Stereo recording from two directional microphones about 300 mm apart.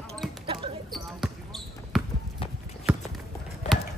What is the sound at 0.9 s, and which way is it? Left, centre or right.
Basketball bounce, centre.